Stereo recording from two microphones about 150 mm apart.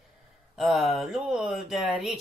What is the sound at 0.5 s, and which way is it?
Speech, centre (ahead or behind).